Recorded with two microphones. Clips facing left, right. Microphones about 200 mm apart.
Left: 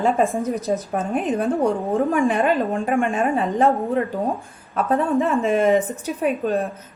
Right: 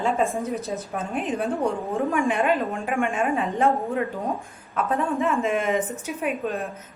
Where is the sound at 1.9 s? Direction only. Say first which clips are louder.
Left 3 dB; 35° left (ahead or behind).